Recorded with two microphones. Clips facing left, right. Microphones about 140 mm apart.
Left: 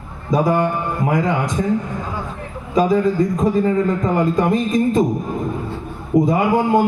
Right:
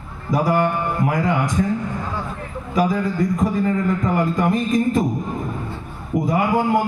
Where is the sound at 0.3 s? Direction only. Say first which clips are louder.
Left 2 dB; 20° left (ahead or behind).